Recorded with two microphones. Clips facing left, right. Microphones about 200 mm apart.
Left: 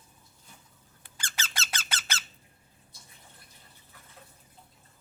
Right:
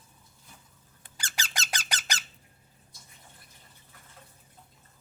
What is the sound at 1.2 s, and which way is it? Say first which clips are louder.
Squeak: right 1 dB; 15° right (ahead or behind).